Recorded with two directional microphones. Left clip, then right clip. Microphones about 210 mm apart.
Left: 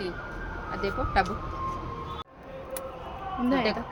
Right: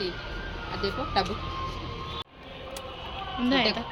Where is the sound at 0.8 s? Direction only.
5° left (ahead or behind).